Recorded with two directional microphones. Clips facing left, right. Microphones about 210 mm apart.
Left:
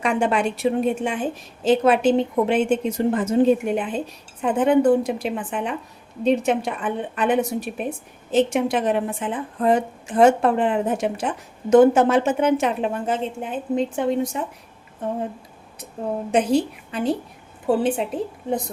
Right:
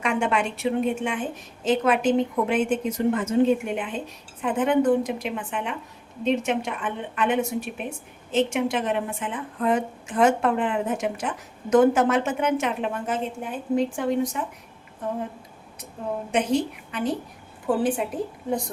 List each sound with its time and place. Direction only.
0.0 s a woman's voice: 35° left (ahead or behind)
16.3 s a woman's voice: 30° left (ahead or behind)